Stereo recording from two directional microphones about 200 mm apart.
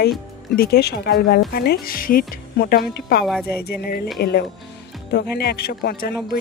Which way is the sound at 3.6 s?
50° left (ahead or behind).